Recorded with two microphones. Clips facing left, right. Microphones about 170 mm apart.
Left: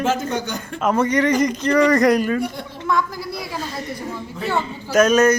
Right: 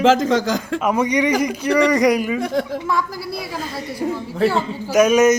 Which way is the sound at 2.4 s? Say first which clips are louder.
Right 6 dB; 90° right.